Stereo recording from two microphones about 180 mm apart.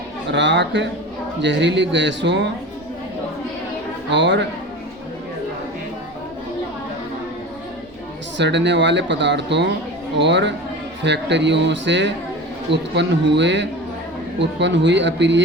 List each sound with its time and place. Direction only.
0.3 s speech: 75° right (ahead or behind)
4.1 s speech: 75° right (ahead or behind)
8.4 s speech: 75° right (ahead or behind)